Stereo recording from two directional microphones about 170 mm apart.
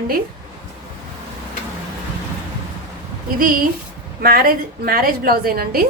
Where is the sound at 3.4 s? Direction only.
55° right (ahead or behind).